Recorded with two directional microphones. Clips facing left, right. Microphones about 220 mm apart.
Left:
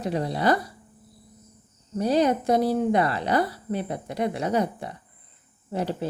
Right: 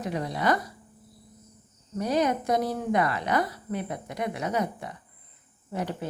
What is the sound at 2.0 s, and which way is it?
A woman's voice, 30° left (ahead or behind).